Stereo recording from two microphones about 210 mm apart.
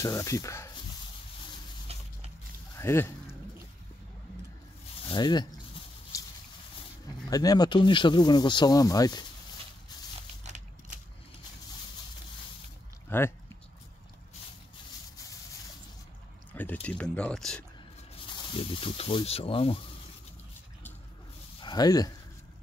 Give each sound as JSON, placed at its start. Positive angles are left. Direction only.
{"t": 0.0, "sound": "speech", "side_deg": 15}
{"t": 1.9, "sound": "a sound", "side_deg": -30}
{"t": 2.8, "sound": "speech", "side_deg": 10}
{"t": 5.0, "sound": "speech", "side_deg": 20}
{"t": 6.1, "sound": "a sound", "side_deg": 15}
{"t": 7.2, "sound": "speech", "side_deg": 15}
{"t": 13.1, "sound": "speech", "side_deg": 10}
{"t": 16.5, "sound": "speech", "side_deg": 10}
{"t": 18.3, "sound": "speech", "side_deg": 25}
{"t": 21.5, "sound": "speech", "side_deg": 20}